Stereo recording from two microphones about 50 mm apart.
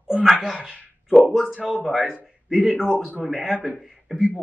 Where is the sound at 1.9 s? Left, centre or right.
Centre.